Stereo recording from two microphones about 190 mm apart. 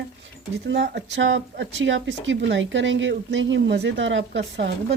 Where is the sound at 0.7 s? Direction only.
60° right (ahead or behind).